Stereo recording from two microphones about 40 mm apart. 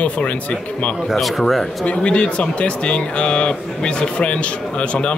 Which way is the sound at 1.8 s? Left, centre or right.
Left.